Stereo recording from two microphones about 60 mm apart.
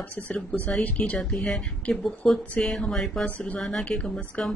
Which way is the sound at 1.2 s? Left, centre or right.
Centre.